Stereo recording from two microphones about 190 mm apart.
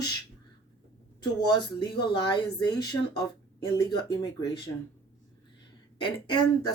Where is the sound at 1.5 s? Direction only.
25° left (ahead or behind).